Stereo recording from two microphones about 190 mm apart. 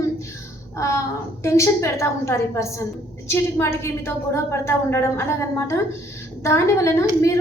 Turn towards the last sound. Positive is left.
turn(degrees=15)  # may be behind; listen again after turning